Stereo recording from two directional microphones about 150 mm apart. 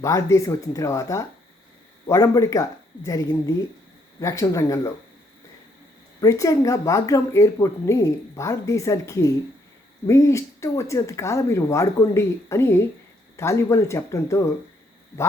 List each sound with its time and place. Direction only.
0.0 s speech: 20° left (ahead or behind)
6.1 s speech: 20° left (ahead or behind)